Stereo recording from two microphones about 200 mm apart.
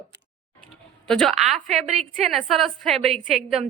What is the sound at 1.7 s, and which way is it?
Speech, 35° right (ahead or behind).